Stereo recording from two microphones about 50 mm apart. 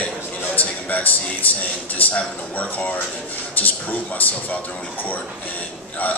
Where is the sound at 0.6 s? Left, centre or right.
Left.